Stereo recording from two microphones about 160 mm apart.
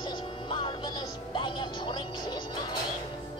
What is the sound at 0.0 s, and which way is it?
Music, 30° left (ahead or behind).